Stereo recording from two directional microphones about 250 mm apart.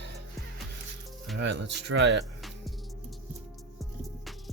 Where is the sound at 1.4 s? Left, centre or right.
Right.